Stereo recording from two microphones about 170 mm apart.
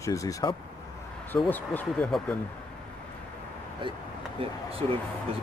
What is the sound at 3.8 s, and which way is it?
Speech, 30° right (ahead or behind).